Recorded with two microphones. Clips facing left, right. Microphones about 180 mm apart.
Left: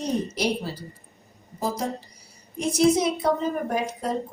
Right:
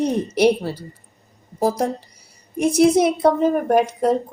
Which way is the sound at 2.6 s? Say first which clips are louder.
Right 6 dB; 60° right (ahead or behind).